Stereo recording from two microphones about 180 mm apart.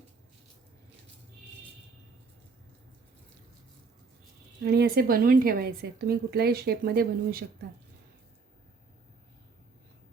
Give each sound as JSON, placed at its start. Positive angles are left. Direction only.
{"t": 4.6, "sound": "speech", "side_deg": -65}